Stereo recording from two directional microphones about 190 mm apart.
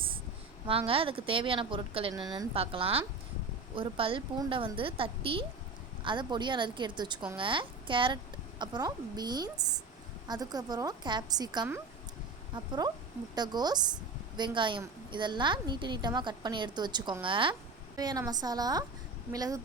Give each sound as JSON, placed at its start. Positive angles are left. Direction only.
{"t": 0.9, "sound": "a woman's voice", "side_deg": -30}